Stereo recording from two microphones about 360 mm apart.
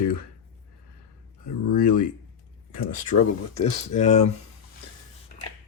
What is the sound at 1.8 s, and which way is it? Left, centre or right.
Speech, left.